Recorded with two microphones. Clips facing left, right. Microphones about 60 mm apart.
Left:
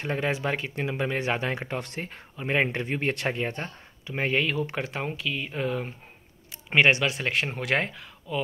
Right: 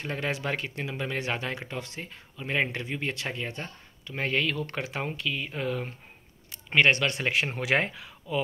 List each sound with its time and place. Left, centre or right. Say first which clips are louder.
0.0 s speech: left 3 dB; centre
1.8 s speech: left 3 dB; left
2.3 s speech: left 3 dB; left
4.0 s speech: left 2 dB; centre
4.8 s speech: left 1 dB; centre
7.1 s speech: even; centre